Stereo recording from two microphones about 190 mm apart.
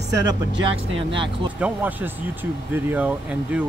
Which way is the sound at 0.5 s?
80° right.